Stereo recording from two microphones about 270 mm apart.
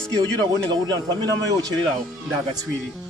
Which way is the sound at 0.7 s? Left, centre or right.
Centre.